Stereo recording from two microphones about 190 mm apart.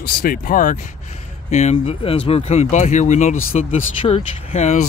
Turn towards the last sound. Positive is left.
turn(degrees=35)  # may be behind; listen again after turning